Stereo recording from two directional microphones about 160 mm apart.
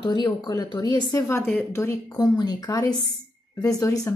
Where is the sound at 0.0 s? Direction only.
25° left (ahead or behind).